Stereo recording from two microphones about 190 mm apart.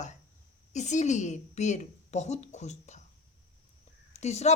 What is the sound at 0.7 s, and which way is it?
A child's voice, 40° left (ahead or behind).